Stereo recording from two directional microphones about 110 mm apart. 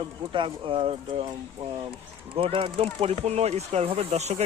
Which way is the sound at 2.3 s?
60° right (ahead or behind).